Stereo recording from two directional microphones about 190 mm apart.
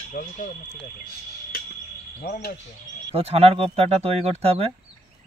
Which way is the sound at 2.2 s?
55° left (ahead or behind).